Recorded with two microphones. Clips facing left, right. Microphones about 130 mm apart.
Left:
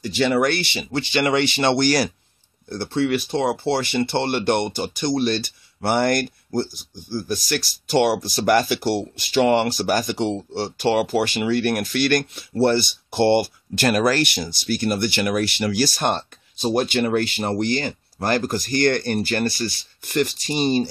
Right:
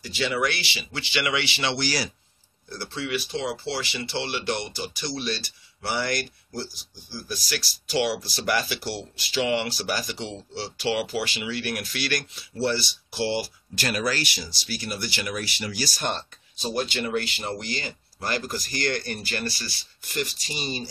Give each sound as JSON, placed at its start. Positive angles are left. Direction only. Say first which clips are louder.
{"t": 0.0, "sound": "speech", "louder": "left 7 dB", "side_deg": 50}